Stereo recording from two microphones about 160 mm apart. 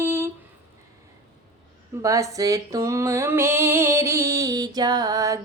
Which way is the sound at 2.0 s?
20° right (ahead or behind).